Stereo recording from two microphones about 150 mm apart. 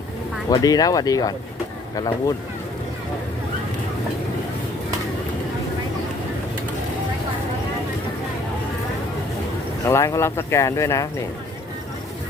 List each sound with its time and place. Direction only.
0.5 s speech: 25° left (ahead or behind)
9.8 s speech: 20° left (ahead or behind)